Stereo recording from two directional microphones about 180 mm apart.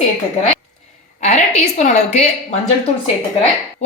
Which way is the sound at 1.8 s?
40° left (ahead or behind).